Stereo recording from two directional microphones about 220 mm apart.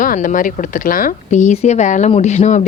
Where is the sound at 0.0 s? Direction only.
35° left (ahead or behind).